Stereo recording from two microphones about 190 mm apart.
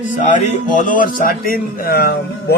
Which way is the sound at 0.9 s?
45° left (ahead or behind).